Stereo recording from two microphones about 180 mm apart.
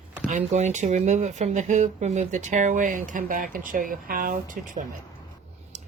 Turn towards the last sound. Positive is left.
turn(degrees=-50)  # may be behind; listen again after turning